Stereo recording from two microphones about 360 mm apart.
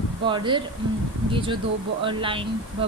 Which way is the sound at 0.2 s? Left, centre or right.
Centre.